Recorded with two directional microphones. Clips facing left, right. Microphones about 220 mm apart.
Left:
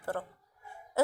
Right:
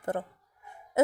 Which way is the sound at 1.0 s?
20° right (ahead or behind).